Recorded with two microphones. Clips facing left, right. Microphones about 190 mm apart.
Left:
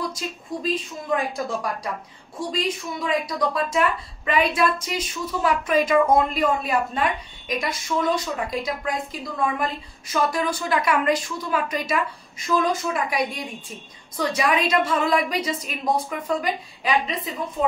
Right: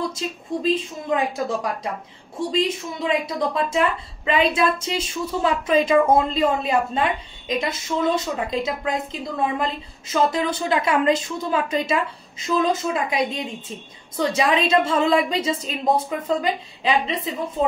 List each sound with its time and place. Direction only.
0.1 s a woman's voice: 25° right (ahead or behind)